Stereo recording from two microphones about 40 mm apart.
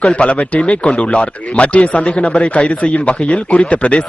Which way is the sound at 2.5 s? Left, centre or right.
Left.